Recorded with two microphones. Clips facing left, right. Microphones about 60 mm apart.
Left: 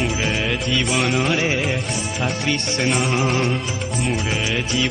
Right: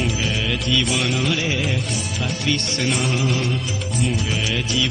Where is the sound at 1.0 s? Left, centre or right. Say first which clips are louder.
Left 2 dB; left.